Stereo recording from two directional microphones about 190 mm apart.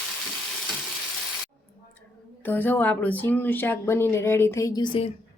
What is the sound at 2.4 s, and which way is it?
Speech, 10° left (ahead or behind).